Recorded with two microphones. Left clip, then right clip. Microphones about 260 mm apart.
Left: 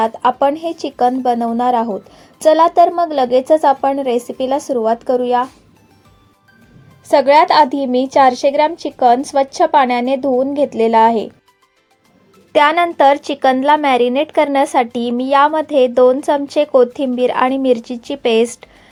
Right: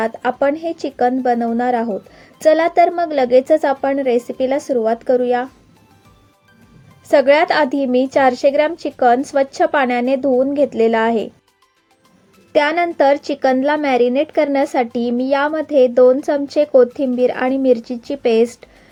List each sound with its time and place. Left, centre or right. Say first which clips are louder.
0.0 s a woman's voice: left 3 dB; centre
7.3 s a woman's voice: left 4 dB; centre
12.5 s a woman's voice: left 3 dB; centre